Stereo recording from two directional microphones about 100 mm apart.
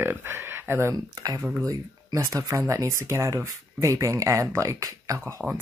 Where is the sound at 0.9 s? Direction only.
35° right (ahead or behind).